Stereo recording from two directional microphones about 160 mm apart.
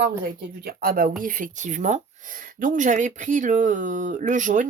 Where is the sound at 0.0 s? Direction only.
80° right.